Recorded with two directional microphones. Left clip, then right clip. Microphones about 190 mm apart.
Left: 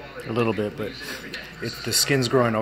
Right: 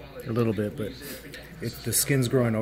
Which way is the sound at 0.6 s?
60° right (ahead or behind).